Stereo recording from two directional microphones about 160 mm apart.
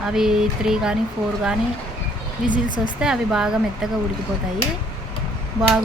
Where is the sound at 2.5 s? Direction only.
55° left (ahead or behind).